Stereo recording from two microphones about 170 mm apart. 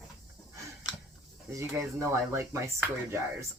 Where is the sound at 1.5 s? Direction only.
15° right (ahead or behind).